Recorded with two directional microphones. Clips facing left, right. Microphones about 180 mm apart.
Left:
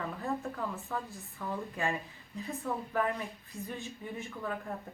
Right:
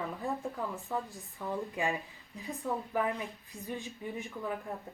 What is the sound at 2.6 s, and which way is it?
Speech, 15° right (ahead or behind).